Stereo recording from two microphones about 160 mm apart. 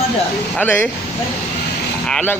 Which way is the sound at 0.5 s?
10° left (ahead or behind).